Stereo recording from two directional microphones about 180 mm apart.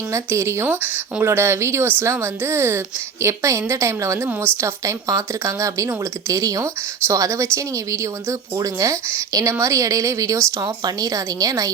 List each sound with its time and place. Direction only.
0.1 s speech: 15° right (ahead or behind)